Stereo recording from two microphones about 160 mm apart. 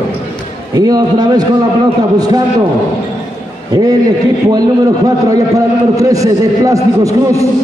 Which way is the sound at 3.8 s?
25° right (ahead or behind).